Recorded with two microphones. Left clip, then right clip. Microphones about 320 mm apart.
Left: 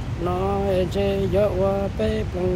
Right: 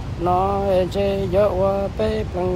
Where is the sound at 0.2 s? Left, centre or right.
Centre.